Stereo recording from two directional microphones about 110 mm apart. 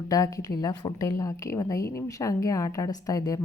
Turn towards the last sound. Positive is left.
turn(degrees=35)  # may be behind; listen again after turning